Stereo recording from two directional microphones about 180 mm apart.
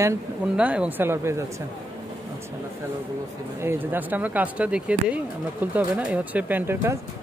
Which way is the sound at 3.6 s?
10° right (ahead or behind).